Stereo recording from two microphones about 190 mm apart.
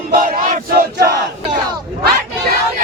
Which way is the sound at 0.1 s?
45° right (ahead or behind).